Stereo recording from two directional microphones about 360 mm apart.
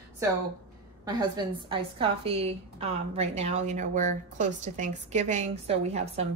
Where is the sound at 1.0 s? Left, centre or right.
Centre.